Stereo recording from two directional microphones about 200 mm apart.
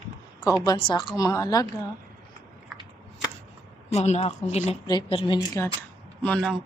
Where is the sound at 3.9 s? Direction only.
35° left (ahead or behind); by 5.7 s 20° left (ahead or behind).